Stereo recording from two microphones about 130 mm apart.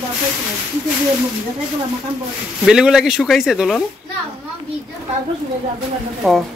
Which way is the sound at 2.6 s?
5° right (ahead or behind).